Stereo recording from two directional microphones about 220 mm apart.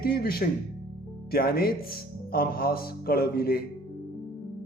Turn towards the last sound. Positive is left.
turn(degrees=45)  # may be behind; listen again after turning